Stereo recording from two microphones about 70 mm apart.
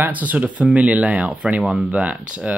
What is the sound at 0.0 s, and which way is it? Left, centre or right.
Speech, right.